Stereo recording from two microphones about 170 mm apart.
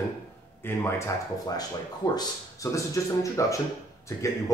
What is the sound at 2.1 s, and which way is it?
Speech, 20° left (ahead or behind).